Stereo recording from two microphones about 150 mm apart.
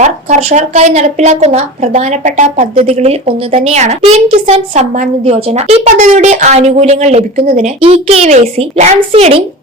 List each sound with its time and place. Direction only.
0.0 s a woman's voice: 50° right (ahead or behind)
2.7 s a woman's voice: 45° right (ahead or behind)